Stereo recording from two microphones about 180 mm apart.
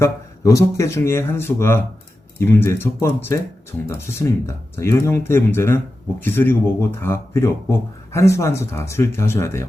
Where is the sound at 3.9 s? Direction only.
15° left (ahead or behind).